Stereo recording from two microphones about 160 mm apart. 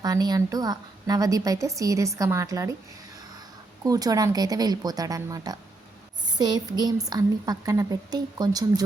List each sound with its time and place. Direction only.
0.0 s a woman's voice: 25° right (ahead or behind)
3.8 s a woman's voice: 20° right (ahead or behind)